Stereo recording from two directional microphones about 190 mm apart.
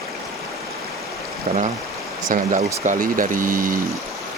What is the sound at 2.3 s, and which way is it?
Speech, 45° right (ahead or behind).